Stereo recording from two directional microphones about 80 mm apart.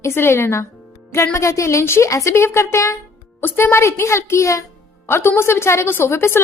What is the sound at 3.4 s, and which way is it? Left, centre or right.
A woman's voice, left.